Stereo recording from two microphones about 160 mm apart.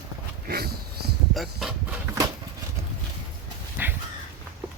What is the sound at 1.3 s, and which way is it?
Speech, centre (ahead or behind).